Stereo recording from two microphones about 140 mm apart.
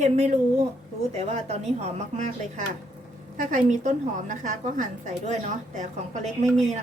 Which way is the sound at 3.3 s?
60° right (ahead or behind).